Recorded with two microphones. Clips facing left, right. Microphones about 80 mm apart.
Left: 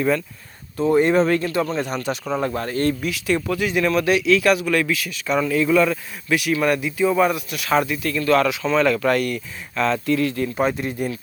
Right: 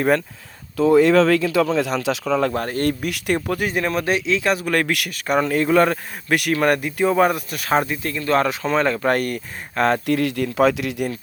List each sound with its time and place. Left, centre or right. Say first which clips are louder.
0.9 s speech: right 3 dB; right
2.6 s speech: even; right
4.6 s speech: even; right
5.1 s speech: right 1 dB; right
8.3 s speech: left 1 dB; right